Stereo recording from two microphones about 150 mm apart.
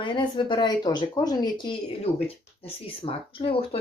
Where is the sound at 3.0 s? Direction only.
40° left (ahead or behind).